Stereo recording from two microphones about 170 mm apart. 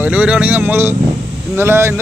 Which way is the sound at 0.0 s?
10° right (ahead or behind).